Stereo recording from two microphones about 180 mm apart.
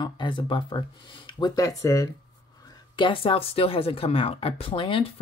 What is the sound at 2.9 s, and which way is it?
Speech, 30° left (ahead or behind).